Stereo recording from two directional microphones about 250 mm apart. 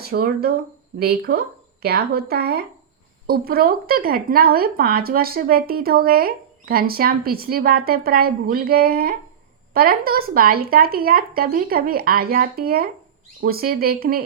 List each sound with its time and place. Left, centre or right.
0.0 s speech: right